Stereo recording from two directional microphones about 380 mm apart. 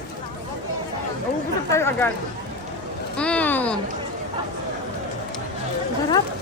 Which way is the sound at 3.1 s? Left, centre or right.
Centre.